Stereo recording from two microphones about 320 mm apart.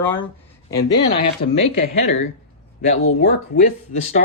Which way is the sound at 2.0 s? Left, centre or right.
Left.